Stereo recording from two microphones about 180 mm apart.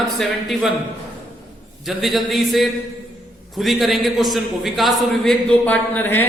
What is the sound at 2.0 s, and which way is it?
A man's voice, centre (ahead or behind).